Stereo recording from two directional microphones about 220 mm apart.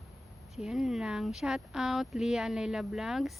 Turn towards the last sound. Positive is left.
turn(degrees=0)  # may be behind; listen again after turning